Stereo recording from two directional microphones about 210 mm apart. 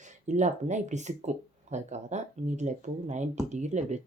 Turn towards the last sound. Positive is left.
turn(degrees=-35)  # may be behind; listen again after turning